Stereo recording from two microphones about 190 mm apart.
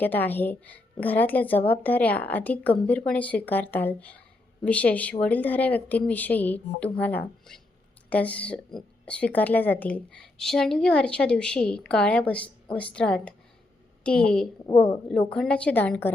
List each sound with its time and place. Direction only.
0.0 s a woman's voice: 10° left (ahead or behind)
14.7 s a woman's voice: 25° left (ahead or behind)
15.3 s speech: 5° left (ahead or behind)